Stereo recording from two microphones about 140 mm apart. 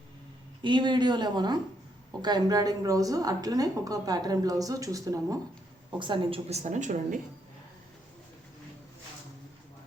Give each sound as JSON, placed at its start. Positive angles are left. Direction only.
{"t": 0.6, "sound": "a woman's voice", "side_deg": -35}
{"t": 6.0, "sound": "a woman's voice", "side_deg": -35}
{"t": 6.5, "sound": "a woman's voice", "side_deg": -55}